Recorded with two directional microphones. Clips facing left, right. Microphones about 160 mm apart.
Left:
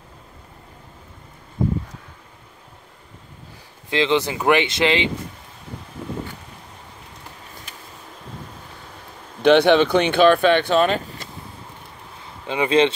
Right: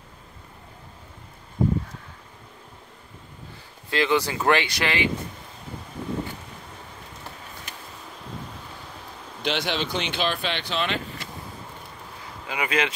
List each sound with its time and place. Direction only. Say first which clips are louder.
3.9 s speech: left 3 dB; 20° left (ahead or behind)
9.4 s speech: left 14 dB; 55° left (ahead or behind)
12.4 s speech: left 9 dB; 25° left (ahead or behind)